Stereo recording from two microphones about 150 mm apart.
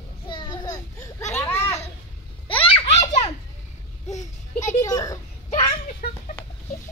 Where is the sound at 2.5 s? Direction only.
40° left (ahead or behind).